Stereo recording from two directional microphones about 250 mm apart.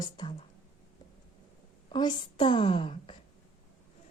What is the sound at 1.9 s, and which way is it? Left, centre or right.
A woman's voice, centre.